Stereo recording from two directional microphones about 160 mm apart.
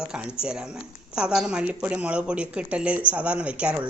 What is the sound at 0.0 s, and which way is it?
A woman's voice, 5° right (ahead or behind).